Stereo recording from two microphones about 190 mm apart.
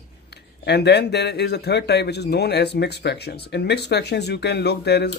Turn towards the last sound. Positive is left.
turn(degrees=60)  # may be behind; listen again after turning